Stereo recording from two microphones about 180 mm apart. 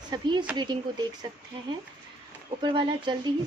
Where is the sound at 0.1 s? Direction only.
25° right (ahead or behind).